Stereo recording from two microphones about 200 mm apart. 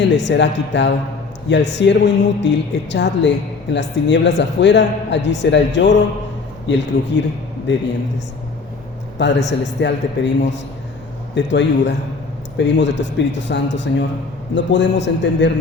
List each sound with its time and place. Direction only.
0.0 s speech: 60° left (ahead or behind)
9.1 s speech: 60° left (ahead or behind)